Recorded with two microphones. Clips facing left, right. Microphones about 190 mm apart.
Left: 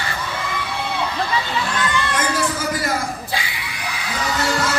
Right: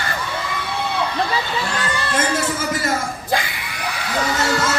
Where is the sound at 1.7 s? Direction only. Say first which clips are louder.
Even; 35° right (ahead or behind).